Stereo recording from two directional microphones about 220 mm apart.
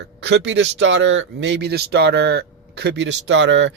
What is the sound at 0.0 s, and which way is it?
Speech, 50° right (ahead or behind).